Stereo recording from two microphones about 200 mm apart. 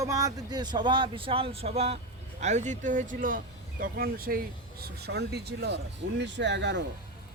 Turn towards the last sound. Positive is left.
turn(degrees=-60)  # may be behind; listen again after turning